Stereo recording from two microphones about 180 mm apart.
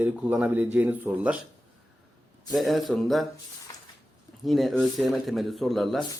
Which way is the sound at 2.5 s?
Centre (ahead or behind).